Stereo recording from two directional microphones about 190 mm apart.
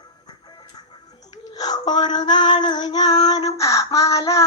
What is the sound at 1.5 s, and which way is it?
Female singing, 20° left (ahead or behind).